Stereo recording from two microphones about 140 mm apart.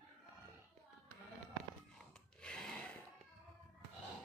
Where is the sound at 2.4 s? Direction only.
5° left (ahead or behind).